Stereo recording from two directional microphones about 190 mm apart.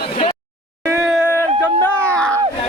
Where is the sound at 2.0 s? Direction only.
5° left (ahead or behind).